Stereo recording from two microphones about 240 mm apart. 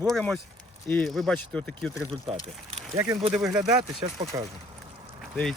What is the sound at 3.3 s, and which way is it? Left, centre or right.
Speech, centre.